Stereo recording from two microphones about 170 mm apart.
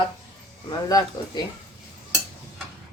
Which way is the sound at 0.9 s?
20° left (ahead or behind).